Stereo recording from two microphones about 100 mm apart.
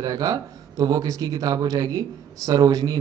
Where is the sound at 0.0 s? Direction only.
40° right (ahead or behind).